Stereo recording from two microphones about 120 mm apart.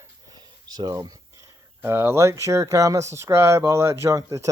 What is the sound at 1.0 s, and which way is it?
Speech, 30° right (ahead or behind).